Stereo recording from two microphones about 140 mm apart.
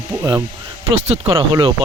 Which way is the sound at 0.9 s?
40° right (ahead or behind).